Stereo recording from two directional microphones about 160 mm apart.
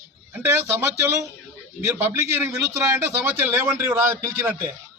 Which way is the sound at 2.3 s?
15° right (ahead or behind).